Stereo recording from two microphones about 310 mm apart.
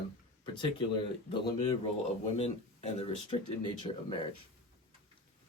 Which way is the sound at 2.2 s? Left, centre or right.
Centre.